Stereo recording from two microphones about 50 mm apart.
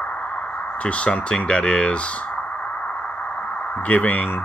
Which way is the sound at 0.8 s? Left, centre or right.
Left.